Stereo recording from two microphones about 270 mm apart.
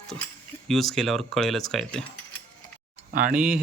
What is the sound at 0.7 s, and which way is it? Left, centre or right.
Speech, centre.